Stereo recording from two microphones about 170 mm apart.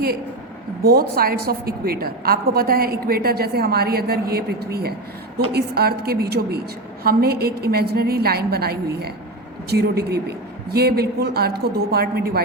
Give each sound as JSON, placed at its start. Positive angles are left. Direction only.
{"t": 0.9, "sound": "a woman's voice", "side_deg": -60}